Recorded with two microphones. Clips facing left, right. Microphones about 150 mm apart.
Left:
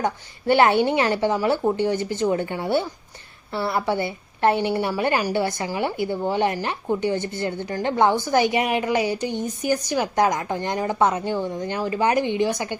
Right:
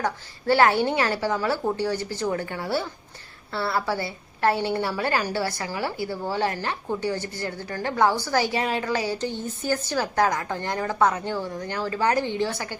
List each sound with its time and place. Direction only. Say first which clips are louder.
0.0 s a woman's voice: left 2 dB; 20° left (ahead or behind)